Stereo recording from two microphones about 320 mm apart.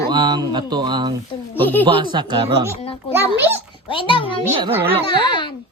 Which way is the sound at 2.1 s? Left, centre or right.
Centre.